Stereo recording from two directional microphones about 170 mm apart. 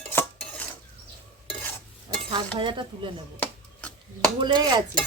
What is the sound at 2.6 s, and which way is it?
Speech, 30° right (ahead or behind).